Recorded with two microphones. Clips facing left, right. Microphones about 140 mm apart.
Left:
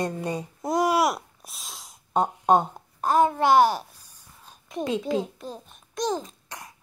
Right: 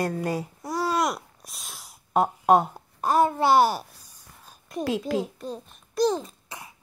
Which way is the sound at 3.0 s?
10° right (ahead or behind).